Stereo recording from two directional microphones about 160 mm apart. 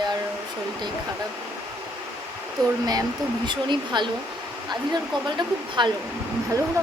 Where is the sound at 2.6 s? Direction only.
25° right (ahead or behind).